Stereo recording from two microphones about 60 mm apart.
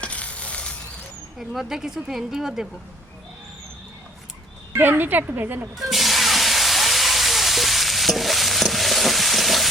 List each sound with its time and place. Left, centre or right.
0.0 s a sound: left
1.4 s speech: centre
4.8 s a woman's voice: right
5.7 s hiss: centre